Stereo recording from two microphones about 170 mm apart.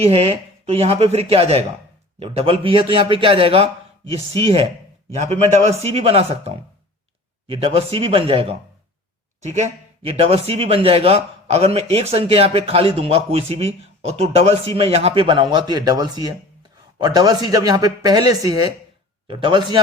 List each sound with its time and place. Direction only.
0.0 s speech: 35° right (ahead or behind)